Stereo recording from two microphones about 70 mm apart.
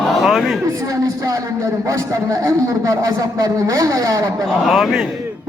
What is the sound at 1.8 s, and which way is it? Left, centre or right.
A man's voice, right.